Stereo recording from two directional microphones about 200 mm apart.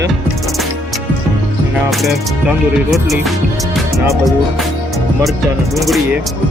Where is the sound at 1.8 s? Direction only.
Centre (ahead or behind).